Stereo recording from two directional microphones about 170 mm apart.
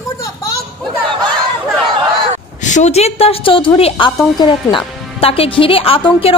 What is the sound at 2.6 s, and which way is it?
A woman's voice, 45° left (ahead or behind).